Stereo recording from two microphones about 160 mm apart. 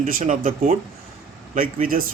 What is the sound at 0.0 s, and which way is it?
A man's voice, 55° right (ahead or behind).